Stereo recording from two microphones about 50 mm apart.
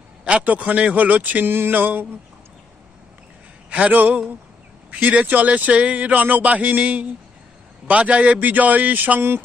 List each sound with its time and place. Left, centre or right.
0.2 s a man's voice: right
1.5 s speech: right
3.7 s speech: right